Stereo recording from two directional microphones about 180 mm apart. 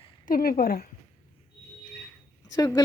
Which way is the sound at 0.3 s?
50° left (ahead or behind).